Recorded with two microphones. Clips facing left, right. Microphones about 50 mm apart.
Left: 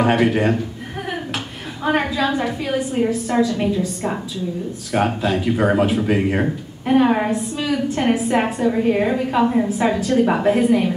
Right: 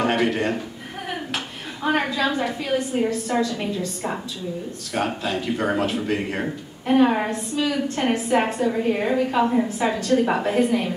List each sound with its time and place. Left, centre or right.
0.0 s speech: centre